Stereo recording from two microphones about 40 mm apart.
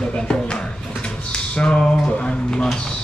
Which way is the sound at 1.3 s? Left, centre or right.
Left.